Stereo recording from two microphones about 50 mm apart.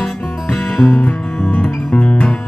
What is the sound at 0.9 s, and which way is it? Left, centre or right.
Music, left.